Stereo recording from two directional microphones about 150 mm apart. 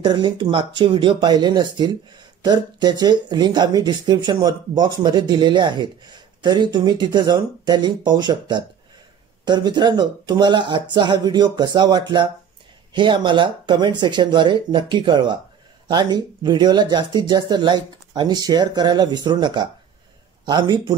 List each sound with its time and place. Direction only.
0.0 s speech: 30° right (ahead or behind)